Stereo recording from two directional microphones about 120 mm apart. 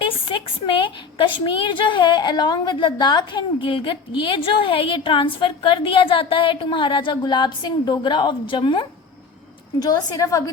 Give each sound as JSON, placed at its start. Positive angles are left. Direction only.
{"t": 0.0, "sound": "a woman's voice", "side_deg": 45}
{"t": 9.8, "sound": "a woman's voice", "side_deg": 30}